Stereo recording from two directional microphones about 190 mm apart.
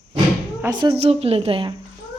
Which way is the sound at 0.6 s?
20° right (ahead or behind).